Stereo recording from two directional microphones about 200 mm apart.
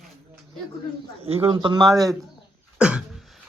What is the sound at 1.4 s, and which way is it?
Speech, 20° right (ahead or behind).